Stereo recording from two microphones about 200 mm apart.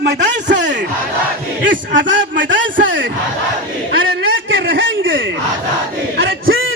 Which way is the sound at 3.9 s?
70° right (ahead or behind).